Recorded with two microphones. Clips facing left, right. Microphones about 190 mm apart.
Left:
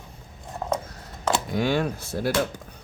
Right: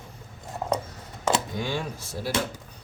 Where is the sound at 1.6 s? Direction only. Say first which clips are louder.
Left 7 dB; 65° left (ahead or behind).